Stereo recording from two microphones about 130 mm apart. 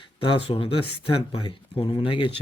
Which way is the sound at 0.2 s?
40° left (ahead or behind).